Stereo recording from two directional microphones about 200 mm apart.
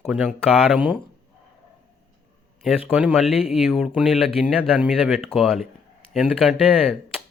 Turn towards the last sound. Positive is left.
turn(degrees=-5)  # may be behind; listen again after turning